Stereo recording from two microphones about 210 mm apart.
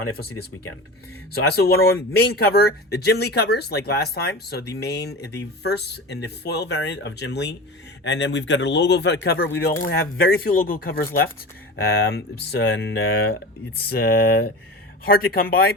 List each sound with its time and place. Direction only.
1.3 s a man's voice: 50° left (ahead or behind)